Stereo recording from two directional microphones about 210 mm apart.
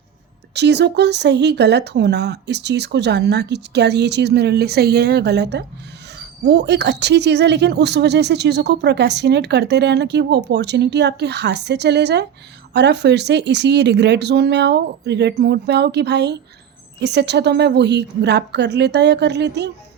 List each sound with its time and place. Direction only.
0.5 s speech: 55° right (ahead or behind)